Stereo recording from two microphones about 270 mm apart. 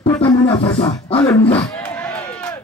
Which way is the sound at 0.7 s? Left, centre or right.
Centre.